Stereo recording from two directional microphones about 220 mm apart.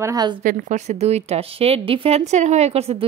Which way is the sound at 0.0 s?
15° right (ahead or behind).